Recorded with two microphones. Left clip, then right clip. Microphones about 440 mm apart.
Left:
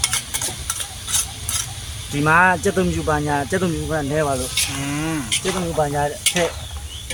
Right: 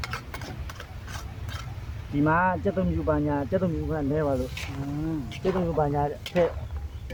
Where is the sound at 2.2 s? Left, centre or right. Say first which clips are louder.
Left 9 dB; right.